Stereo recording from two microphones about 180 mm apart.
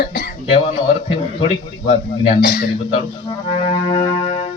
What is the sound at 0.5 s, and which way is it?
A man's voice, 35° left (ahead or behind).